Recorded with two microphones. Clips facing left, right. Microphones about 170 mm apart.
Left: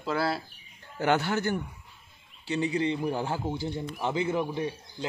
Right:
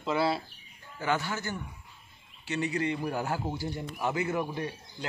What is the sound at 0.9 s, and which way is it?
Speech, 70° left (ahead or behind).